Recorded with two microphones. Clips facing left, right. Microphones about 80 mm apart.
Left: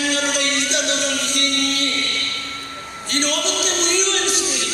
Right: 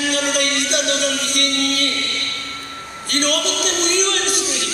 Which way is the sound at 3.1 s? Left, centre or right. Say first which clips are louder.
Right 2 dB; right.